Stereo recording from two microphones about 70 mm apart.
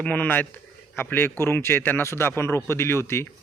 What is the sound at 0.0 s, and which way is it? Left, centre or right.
Speech, left.